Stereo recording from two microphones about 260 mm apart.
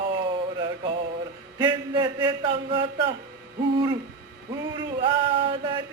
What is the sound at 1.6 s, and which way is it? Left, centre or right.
Speech, centre.